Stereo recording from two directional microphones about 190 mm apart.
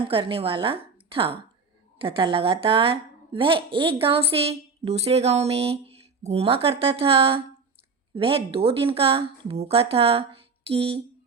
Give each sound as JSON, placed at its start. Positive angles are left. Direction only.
{"t": 0.0, "sound": "a woman's voice", "side_deg": -30}